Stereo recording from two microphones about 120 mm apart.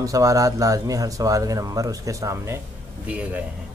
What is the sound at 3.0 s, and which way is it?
Speech, 10° right (ahead or behind).